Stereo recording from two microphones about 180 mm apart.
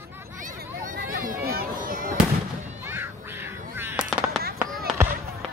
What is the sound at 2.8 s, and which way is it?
Crow, 10° right (ahead or behind).